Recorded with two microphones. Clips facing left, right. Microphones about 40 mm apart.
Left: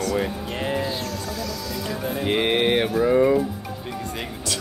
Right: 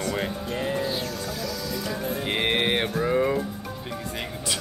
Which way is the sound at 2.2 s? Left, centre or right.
Centre.